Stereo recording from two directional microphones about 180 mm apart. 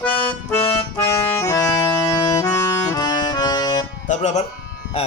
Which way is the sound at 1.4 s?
20° left (ahead or behind).